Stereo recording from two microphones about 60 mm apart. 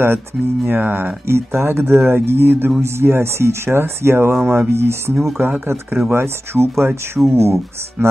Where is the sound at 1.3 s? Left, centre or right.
Right.